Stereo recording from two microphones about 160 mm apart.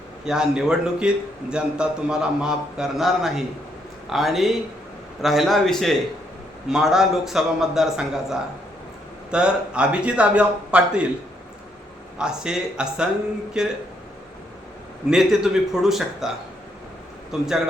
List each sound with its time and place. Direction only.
0.3 s a man's voice: 5° right (ahead or behind)
12.1 s a man's voice: 5° right (ahead or behind)
15.1 s a man's voice: centre (ahead or behind)
17.3 s a man's voice: centre (ahead or behind)